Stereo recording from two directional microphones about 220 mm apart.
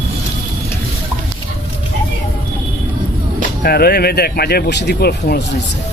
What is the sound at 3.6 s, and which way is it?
Speech, 45° left (ahead or behind).